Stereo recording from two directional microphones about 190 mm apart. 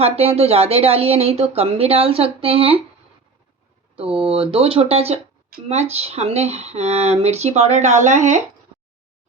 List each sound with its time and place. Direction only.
0.0 s speech: 30° right (ahead or behind)
3.9 s speech: 30° right (ahead or behind)